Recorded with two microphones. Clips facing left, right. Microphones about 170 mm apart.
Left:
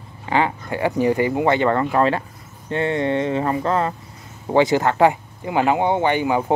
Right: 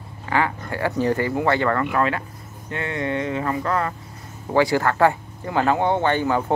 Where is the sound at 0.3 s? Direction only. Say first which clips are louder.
Left 2 dB; 20° left (ahead or behind).